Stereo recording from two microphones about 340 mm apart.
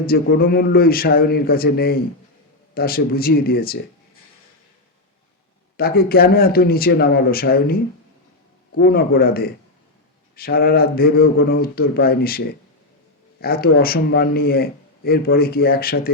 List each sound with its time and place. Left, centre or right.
0.0 s a man's voice: left
5.7 s a man's voice: left
13.4 s a man's voice: left